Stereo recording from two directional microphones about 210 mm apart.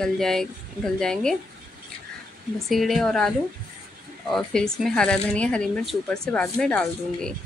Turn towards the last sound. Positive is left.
turn(degrees=5)  # may be behind; listen again after turning